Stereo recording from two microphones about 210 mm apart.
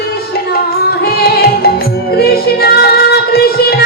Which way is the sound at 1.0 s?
45° left (ahead or behind).